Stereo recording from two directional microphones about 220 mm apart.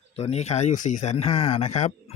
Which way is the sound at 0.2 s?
30° left (ahead or behind).